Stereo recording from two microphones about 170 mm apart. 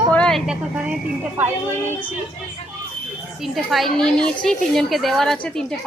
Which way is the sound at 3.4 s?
Centre (ahead or behind).